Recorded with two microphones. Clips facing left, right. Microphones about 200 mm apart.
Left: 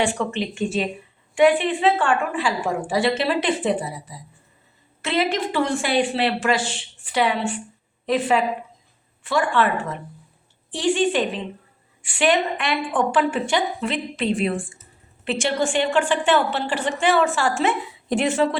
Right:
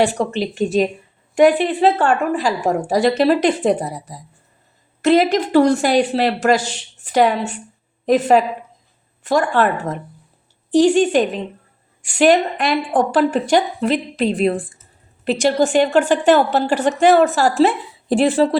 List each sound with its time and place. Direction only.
0.0 s a woman's voice: 40° right (ahead or behind)